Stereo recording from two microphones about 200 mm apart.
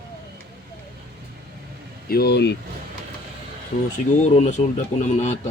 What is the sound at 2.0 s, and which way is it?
Speech, 50° left (ahead or behind).